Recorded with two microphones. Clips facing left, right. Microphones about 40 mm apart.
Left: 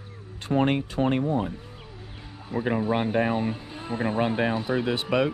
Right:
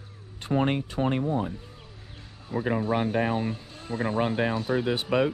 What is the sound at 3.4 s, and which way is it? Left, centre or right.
Speech, left.